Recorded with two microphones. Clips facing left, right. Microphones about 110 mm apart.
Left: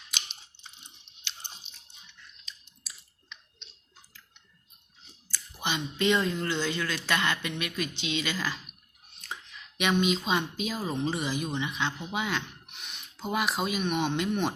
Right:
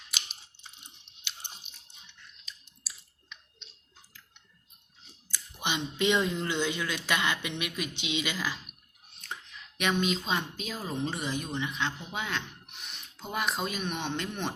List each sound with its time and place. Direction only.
0.1 s chewing: 5° right (ahead or behind)
1.2 s crunch: 10° right (ahead or behind)
2.4 s chewing: 5° right (ahead or behind)
5.3 s speech: 15° right (ahead or behind)
9.2 s speech: 5° left (ahead or behind)